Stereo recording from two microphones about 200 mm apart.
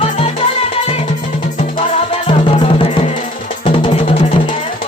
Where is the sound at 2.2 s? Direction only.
25° left (ahead or behind).